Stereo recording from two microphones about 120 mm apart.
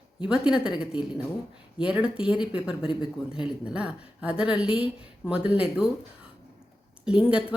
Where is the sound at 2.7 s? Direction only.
50° left (ahead or behind).